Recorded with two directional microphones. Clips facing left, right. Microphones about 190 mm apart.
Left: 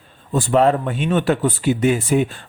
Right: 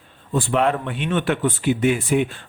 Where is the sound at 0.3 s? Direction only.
40° left (ahead or behind).